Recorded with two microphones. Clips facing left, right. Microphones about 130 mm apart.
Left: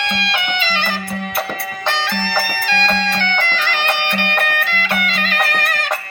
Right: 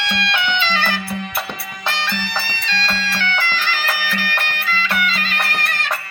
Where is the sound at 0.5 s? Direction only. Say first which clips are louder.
Right 1 dB; 45° left (ahead or behind).